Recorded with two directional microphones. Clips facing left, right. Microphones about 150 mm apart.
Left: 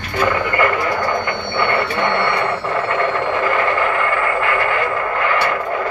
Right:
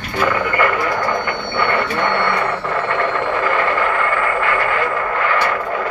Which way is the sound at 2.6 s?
10° left (ahead or behind).